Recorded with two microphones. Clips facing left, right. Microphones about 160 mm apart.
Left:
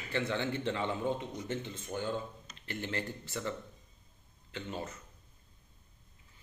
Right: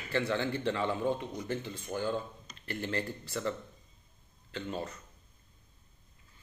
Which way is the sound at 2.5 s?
20° left (ahead or behind).